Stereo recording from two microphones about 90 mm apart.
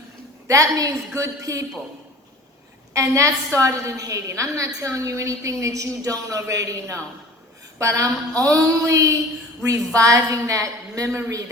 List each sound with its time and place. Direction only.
0.4 s a woman's voice: 40° right (ahead or behind)
2.9 s a woman's voice: 35° right (ahead or behind)